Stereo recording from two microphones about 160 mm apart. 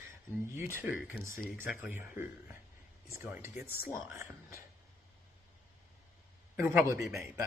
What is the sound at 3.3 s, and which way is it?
Speech, 15° right (ahead or behind).